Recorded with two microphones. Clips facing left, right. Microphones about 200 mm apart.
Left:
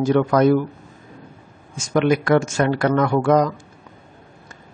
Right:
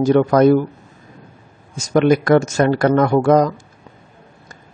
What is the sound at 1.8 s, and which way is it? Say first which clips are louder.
Speech: right 4 dB; 40° right (ahead or behind).